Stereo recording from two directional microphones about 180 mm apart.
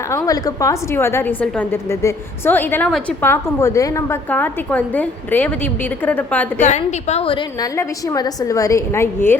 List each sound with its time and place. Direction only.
0.1 s a woman's voice: 20° left (ahead or behind)
6.6 s a woman's voice: 40° left (ahead or behind); by 9.3 s 15° left (ahead or behind)